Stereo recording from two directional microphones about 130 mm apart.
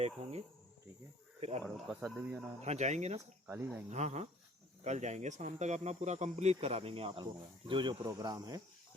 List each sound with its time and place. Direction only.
0.0 s speech: 55° right (ahead or behind)
2.0 s speech: 5° right (ahead or behind)
2.6 s speech: 60° right (ahead or behind)
3.4 s speech: 15° right (ahead or behind)
3.8 s speech: 60° right (ahead or behind); by 8.6 s 30° right (ahead or behind)